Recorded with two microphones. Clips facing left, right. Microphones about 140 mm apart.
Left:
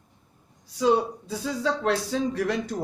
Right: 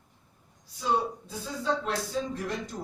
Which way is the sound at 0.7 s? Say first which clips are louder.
Left 7 dB; 90° left.